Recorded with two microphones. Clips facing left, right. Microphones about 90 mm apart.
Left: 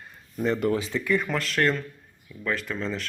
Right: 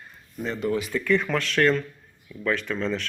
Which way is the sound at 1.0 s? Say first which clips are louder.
Right 2 dB; 10° left (ahead or behind).